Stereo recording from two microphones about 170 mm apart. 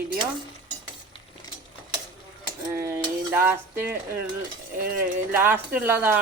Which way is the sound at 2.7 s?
15° right (ahead or behind).